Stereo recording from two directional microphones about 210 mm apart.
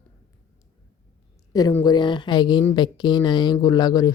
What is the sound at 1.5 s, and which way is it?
A woman's voice, 20° left (ahead or behind).